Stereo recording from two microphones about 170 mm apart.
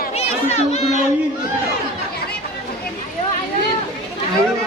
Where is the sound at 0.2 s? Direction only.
40° left (ahead or behind).